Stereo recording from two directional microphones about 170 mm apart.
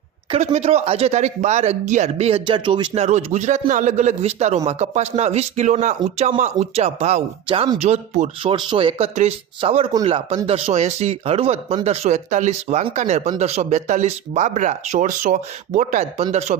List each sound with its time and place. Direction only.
0.3 s speech: 40° right (ahead or behind)
8.5 s a man's voice: 30° right (ahead or behind); by 16.7 s 45° right (ahead or behind)